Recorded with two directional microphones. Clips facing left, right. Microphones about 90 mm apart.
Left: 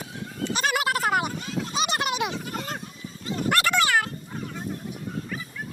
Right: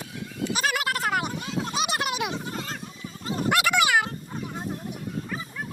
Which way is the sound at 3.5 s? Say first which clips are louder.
Even; 10° right (ahead or behind).